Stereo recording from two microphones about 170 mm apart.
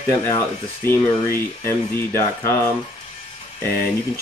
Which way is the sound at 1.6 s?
15° left (ahead or behind).